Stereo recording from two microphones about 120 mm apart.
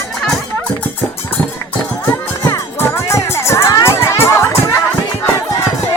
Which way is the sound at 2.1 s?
25° left (ahead or behind).